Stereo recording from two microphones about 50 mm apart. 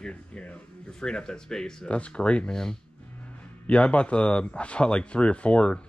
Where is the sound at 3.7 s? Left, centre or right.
Left.